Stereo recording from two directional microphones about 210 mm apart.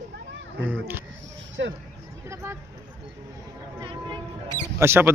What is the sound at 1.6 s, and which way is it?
Speech, 55° right (ahead or behind).